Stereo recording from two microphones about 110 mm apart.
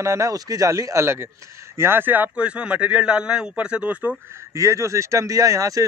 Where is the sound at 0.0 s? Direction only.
25° right (ahead or behind); by 4.2 s 10° right (ahead or behind).